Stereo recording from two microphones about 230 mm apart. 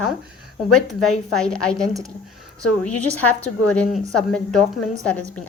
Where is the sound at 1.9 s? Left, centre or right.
Centre.